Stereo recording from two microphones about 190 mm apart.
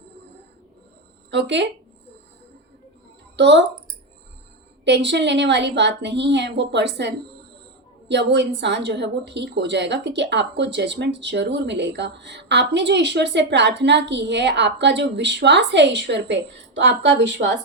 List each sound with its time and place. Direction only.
1.3 s a woman's voice: 65° right (ahead or behind)
3.3 s speech: 65° right (ahead or behind)
4.9 s a woman's voice: 65° right (ahead or behind)